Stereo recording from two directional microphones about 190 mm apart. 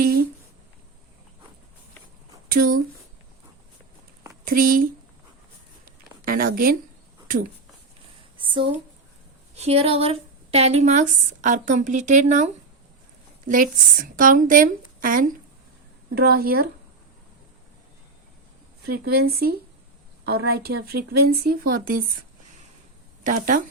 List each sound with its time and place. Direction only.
0.0 s a sound: 50° right (ahead or behind)
2.5 s a woman's voice: 50° right (ahead or behind)
4.4 s speech: 50° right (ahead or behind)
5.8 s a sound: 50° right (ahead or behind)
9.6 s a woman's voice: 30° right (ahead or behind)
14.2 s a woman's voice: 45° right (ahead or behind)
18.9 s speech: 55° right (ahead or behind)
23.2 s a woman's voice: 45° right (ahead or behind)